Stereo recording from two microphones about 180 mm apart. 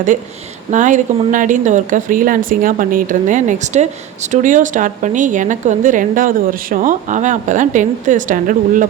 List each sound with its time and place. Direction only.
0.7 s a woman's voice: 45° right (ahead or behind)